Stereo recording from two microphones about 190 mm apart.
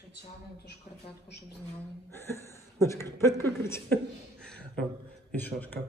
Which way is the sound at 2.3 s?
15° left (ahead or behind).